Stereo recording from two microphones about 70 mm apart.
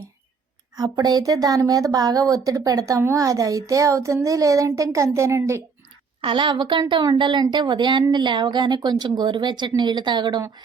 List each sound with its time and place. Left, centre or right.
0.8 s a child's voice: right
6.5 s speech: right